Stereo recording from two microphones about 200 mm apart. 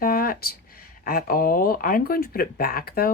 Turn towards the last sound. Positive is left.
turn(degrees=50)  # may be behind; listen again after turning